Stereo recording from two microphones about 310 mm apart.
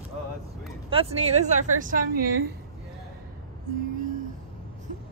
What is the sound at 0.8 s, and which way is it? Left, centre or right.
A woman's voice, centre.